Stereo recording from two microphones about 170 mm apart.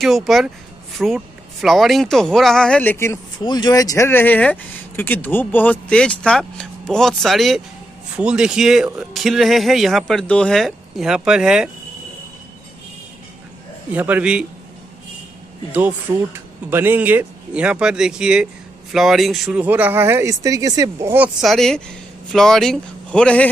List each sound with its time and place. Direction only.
0.0 s speech: centre (ahead or behind)
13.9 s a man's voice: 10° right (ahead or behind)
16.3 s speech: 15° right (ahead or behind); by 23.5 s 5° left (ahead or behind)